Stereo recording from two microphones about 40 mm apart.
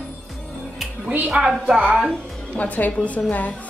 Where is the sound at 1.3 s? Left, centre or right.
Right.